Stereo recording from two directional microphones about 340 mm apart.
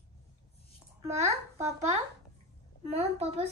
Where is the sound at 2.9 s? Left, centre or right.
Centre.